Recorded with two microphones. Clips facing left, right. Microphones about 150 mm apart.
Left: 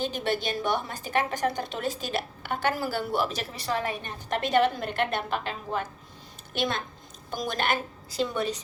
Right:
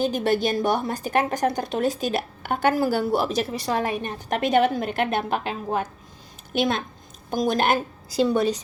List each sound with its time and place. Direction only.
0.0 s a woman's voice: 45° right (ahead or behind)